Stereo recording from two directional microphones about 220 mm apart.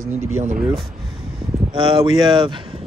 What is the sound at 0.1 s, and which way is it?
Speech, 35° right (ahead or behind).